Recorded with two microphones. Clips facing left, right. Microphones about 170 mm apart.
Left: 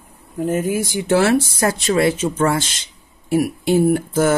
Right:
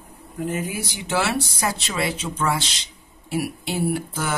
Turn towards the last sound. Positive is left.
turn(degrees=50)  # may be behind; listen again after turning